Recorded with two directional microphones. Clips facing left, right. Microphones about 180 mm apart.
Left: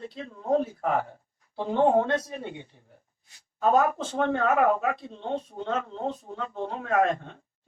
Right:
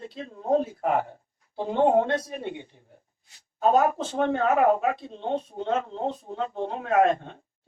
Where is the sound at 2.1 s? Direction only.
30° right (ahead or behind).